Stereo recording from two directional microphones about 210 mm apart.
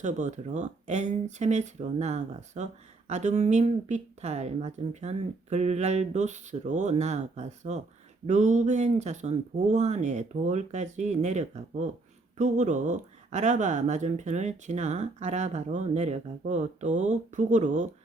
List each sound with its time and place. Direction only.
0.0 s speech: 35° right (ahead or behind)